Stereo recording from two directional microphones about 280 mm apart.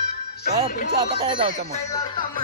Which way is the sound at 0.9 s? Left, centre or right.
Centre.